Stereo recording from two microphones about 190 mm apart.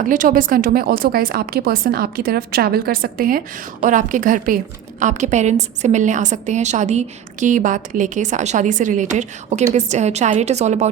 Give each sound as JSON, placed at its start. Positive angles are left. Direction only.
{"t": 0.1, "sound": "a woman's voice", "side_deg": -45}